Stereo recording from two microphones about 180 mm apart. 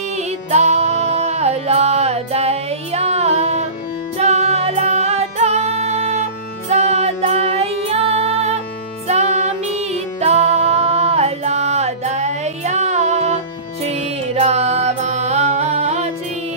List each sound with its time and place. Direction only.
0.5 s music: 40° right (ahead or behind)